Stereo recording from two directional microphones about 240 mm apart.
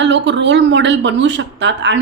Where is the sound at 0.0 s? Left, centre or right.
Right.